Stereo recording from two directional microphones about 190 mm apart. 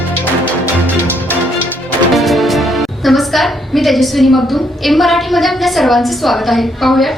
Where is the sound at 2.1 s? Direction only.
Centre (ahead or behind).